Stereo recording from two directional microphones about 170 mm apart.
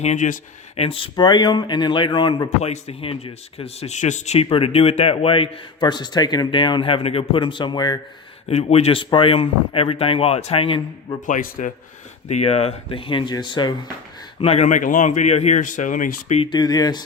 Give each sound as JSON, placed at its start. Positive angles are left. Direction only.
{"t": 0.0, "sound": "speech", "side_deg": 45}
{"t": 0.8, "sound": "a man's voice", "side_deg": 30}
{"t": 8.4, "sound": "speech", "side_deg": 40}
{"t": 11.3, "sound": "speech", "side_deg": 55}
{"t": 12.3, "sound": "a man's voice", "side_deg": 40}
{"t": 14.4, "sound": "speech", "side_deg": 40}
{"t": 16.4, "sound": "a man's voice", "side_deg": 25}